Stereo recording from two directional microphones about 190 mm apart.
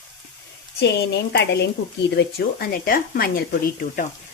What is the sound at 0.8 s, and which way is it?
A woman's voice, 60° left (ahead or behind).